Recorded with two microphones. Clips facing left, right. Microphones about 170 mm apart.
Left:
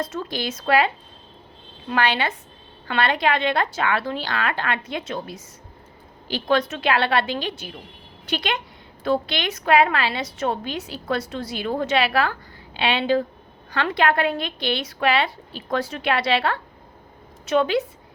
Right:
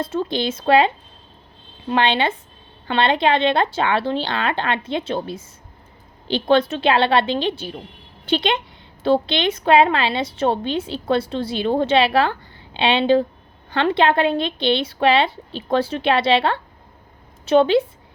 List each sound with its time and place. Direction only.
0.0 s a woman's voice: 30° right (ahead or behind)
1.9 s a woman's voice: 25° right (ahead or behind)